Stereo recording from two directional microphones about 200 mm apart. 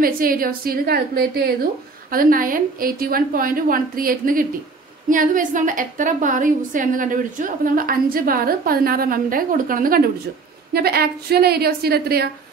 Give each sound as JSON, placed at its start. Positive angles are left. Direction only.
{"t": 0.0, "sound": "a woman's voice", "side_deg": -45}